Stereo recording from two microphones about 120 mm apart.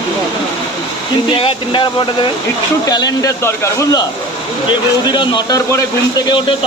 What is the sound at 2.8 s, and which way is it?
Speech, 30° left (ahead or behind).